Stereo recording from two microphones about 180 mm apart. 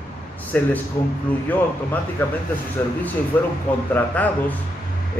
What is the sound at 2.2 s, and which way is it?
Speech, 10° left (ahead or behind).